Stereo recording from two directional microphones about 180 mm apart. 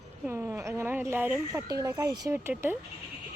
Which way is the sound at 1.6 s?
15° right (ahead or behind).